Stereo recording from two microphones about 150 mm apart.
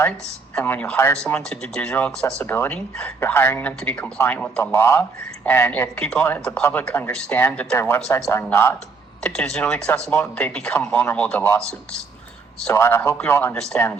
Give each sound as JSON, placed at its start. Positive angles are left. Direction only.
{"t": 0.5, "sound": "speech", "side_deg": 10}
{"t": 4.6, "sound": "speech", "side_deg": 15}
{"t": 9.2, "sound": "speech", "side_deg": 5}
{"t": 10.8, "sound": "speech", "side_deg": 15}
{"t": 12.7, "sound": "speech", "side_deg": 15}